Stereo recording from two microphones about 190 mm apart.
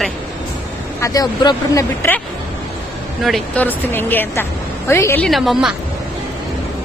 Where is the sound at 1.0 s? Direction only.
20° left (ahead or behind).